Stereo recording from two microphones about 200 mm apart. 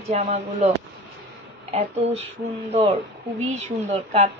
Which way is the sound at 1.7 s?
30° right (ahead or behind).